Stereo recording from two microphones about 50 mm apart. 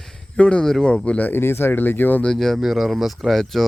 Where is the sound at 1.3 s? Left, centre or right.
Left.